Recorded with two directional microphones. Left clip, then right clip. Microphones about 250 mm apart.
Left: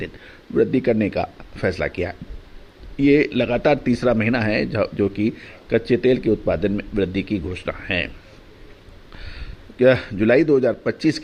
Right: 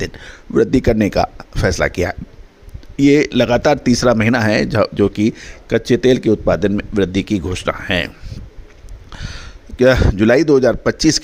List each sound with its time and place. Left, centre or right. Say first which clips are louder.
0.0 s speech: right 7 dB; right
9.1 s a man's voice: right 7 dB; right